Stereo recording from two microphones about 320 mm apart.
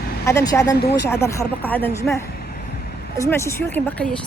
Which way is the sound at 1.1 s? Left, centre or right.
Centre.